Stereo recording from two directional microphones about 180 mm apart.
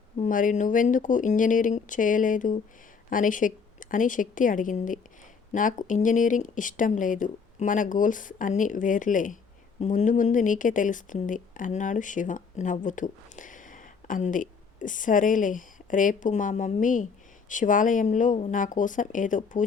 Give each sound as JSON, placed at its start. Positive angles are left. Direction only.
{"t": 0.2, "sound": "speech", "side_deg": 45}